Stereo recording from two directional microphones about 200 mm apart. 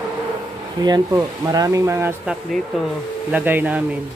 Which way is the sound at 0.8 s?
20° right (ahead or behind).